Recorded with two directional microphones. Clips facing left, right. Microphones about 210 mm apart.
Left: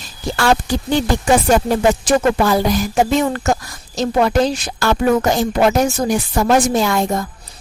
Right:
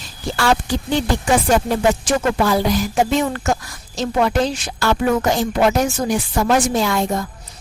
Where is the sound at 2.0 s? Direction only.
45° left (ahead or behind).